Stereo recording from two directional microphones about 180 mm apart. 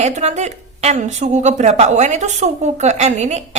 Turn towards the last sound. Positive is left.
turn(degrees=-40)  # may be behind; listen again after turning